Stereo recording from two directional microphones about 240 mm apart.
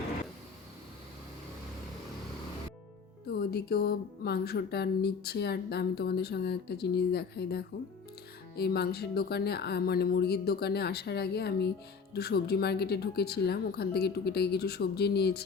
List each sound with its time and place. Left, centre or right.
3.2 s speech: left